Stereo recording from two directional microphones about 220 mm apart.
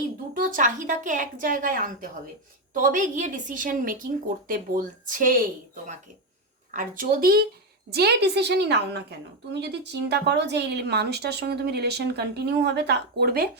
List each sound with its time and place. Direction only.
0.3 s a woman's voice: 40° right (ahead or behind)
6.7 s a woman's voice: 40° right (ahead or behind)